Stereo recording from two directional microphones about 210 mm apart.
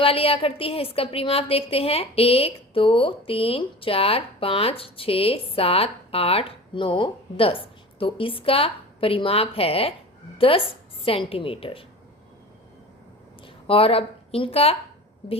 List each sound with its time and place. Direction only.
0.0 s a woman's voice: 25° left (ahead or behind)
13.4 s a woman's voice: 25° left (ahead or behind)